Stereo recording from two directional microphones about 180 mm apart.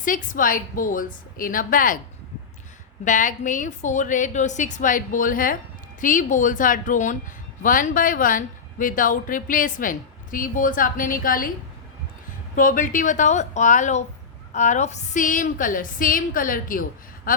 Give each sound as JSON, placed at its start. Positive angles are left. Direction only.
{"t": 0.0, "sound": "a woman's voice", "side_deg": 50}
{"t": 3.0, "sound": "a woman's voice", "side_deg": 45}
{"t": 12.5, "sound": "a woman's voice", "side_deg": 50}
{"t": 17.3, "sound": "a sound", "side_deg": 50}